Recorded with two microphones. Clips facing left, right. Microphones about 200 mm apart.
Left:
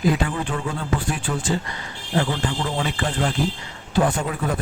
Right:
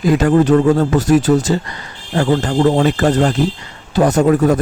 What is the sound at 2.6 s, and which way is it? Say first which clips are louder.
Speech: right 13 dB; 60° right (ahead or behind).